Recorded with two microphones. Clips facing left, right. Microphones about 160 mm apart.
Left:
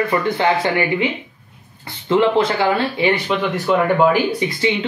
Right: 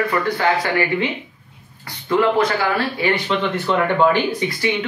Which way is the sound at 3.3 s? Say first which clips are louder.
Left 2 dB; 10° left (ahead or behind).